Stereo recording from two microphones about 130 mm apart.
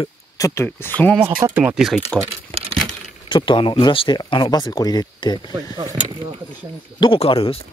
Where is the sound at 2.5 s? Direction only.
50° right (ahead or behind).